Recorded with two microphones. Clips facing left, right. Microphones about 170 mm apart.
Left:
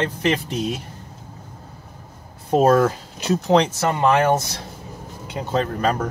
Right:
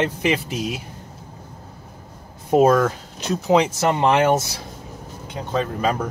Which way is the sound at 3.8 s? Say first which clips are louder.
Even; 20° right (ahead or behind).